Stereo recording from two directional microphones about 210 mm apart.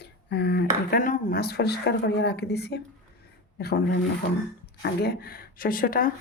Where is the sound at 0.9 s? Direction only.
35° left (ahead or behind).